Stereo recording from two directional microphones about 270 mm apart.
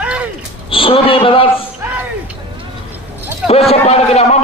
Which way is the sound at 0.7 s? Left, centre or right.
Centre.